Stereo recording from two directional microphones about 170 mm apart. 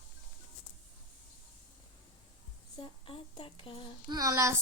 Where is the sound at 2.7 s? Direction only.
30° left (ahead or behind).